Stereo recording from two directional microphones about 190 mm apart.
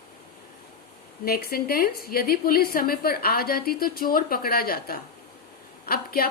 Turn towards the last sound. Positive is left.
turn(degrees=50)  # may be behind; listen again after turning